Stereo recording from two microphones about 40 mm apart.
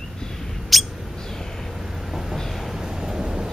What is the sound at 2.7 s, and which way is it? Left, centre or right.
Vehicle, centre.